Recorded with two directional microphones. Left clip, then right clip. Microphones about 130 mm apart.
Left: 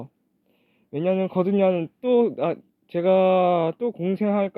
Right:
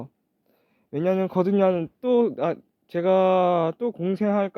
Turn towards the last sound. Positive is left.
turn(degrees=-20)  # may be behind; listen again after turning